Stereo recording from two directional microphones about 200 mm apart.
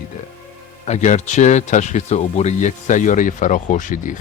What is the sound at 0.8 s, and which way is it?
Speech, 35° left (ahead or behind).